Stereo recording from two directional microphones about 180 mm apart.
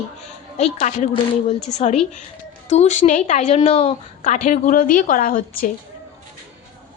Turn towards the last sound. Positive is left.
turn(degrees=50)  # may be behind; listen again after turning